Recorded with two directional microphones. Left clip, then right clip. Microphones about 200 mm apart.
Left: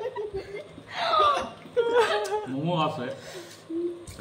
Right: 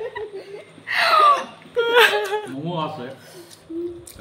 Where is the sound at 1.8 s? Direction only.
Centre (ahead or behind).